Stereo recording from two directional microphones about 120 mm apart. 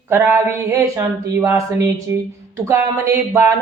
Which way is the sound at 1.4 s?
20° right (ahead or behind).